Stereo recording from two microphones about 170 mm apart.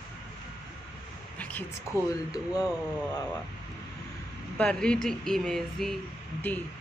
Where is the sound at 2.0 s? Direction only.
20° left (ahead or behind).